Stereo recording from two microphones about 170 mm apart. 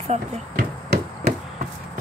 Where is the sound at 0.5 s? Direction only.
70° right (ahead or behind).